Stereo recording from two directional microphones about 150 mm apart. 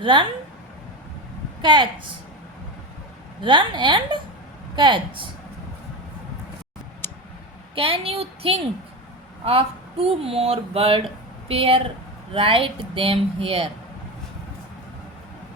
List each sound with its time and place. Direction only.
0.0 s speech: 35° right (ahead or behind)
1.6 s speech: 30° right (ahead or behind)
3.4 s speech: 30° right (ahead or behind)
7.8 s speech: 40° right (ahead or behind)